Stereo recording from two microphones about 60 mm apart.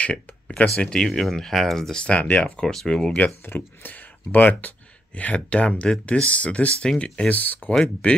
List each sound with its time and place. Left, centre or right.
0.0 s speech: centre
2.6 s speech: centre
3.4 s speech: left
7.7 s speech: centre